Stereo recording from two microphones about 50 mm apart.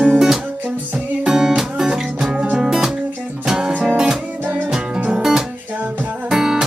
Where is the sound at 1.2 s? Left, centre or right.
Centre.